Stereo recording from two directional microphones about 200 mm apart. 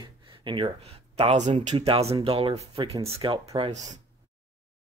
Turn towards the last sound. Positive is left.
turn(degrees=-35)  # may be behind; listen again after turning